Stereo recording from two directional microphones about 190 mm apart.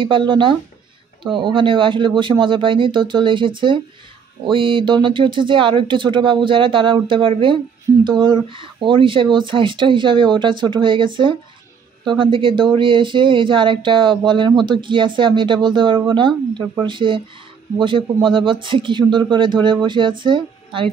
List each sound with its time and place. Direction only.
0.0 s speech: 25° right (ahead or behind)